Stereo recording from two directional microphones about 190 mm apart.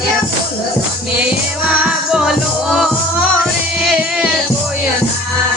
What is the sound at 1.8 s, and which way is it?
Music, 5° right (ahead or behind).